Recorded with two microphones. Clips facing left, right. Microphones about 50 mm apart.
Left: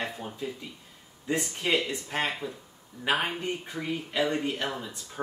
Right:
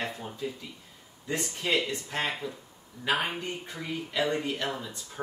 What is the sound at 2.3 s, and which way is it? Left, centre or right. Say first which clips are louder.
Speech: even; centre.